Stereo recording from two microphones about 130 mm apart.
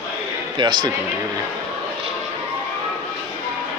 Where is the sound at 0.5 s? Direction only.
35° right (ahead or behind).